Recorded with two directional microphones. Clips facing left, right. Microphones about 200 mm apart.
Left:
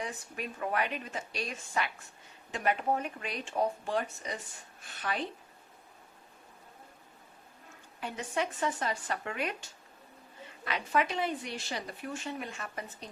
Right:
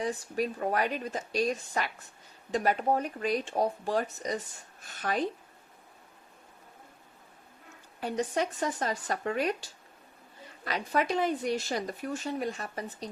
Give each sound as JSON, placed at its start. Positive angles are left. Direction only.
{"t": 0.0, "sound": "a woman's voice", "side_deg": -35}
{"t": 8.0, "sound": "a woman's voice", "side_deg": -40}